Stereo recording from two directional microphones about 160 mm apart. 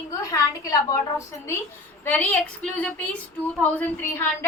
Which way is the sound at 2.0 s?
10° left (ahead or behind).